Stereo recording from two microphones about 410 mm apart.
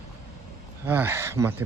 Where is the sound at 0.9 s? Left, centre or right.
Centre.